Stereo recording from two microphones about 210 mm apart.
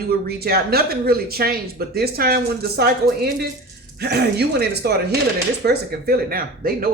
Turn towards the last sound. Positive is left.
turn(degrees=-45)  # may be behind; listen again after turning